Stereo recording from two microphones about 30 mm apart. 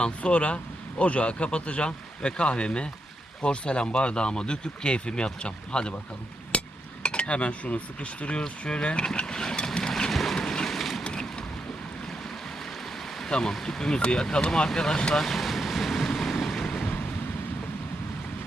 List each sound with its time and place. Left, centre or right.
0.2 s speech: left
6.5 s a sound: left
7.0 s speech: left
9.2 s vehicle: left
10.1 s vehicle: centre
10.3 s vehicle: left
10.7 s vehicle: centre
11.0 s boat: left
13.3 s speech: left
15.2 s vehicle: centre
16.6 s vehicle: centre